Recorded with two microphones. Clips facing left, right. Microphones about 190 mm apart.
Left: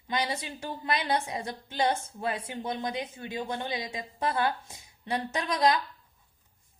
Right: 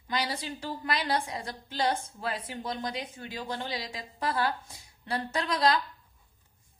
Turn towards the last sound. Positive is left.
turn(degrees=20)  # may be behind; listen again after turning